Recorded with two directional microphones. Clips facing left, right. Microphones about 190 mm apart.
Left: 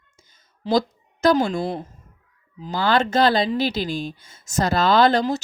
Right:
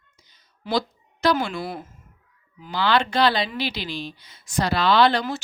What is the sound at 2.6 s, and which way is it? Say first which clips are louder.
Speech: left 2 dB; 45° left (ahead or behind).